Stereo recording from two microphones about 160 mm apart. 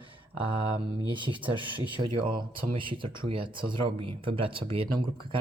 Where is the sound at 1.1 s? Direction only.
30° right (ahead or behind).